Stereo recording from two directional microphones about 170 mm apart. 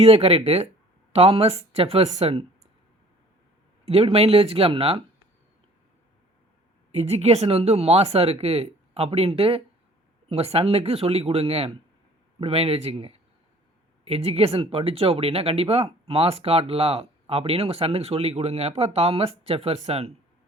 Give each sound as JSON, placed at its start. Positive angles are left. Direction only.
{"t": 0.0, "sound": "speech", "side_deg": -35}
{"t": 3.8, "sound": "speech", "side_deg": -35}
{"t": 6.9, "sound": "speech", "side_deg": -40}